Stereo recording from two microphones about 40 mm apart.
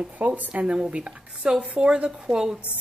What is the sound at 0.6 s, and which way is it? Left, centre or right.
Speech, right.